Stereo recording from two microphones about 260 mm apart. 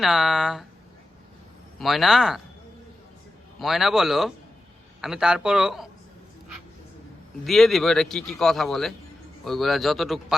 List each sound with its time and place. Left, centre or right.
0.0 s speech: centre
1.8 s speech: centre
3.6 s speech: centre
7.4 s speech: centre